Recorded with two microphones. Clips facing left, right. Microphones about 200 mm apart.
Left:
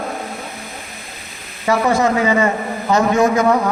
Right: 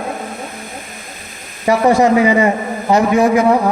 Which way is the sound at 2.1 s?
15° right (ahead or behind).